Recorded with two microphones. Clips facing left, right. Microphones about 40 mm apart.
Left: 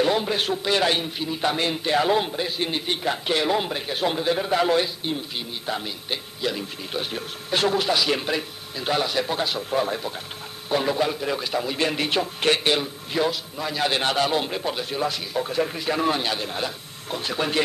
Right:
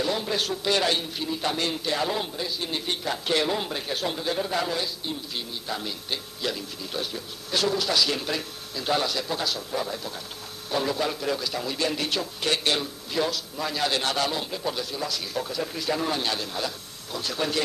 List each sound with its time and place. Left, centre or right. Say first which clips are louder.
0.0 s a man's voice: left 5 dB; left
0.7 s a man's voice: left 2 dB; centre; by 2.7 s left
2.7 s a man's voice: left 3 dB; left
5.7 s a man's voice: left 3 dB; centre
6.8 s a man's voice: left 3 dB; left
7.9 s a man's voice: left 3 dB; left
9.7 s a man's voice: left 6 dB; left
10.7 s a man's voice: left 4 dB; left
12.6 s a man's voice: left 3 dB; centre
13.8 s a man's voice: left 4 dB; left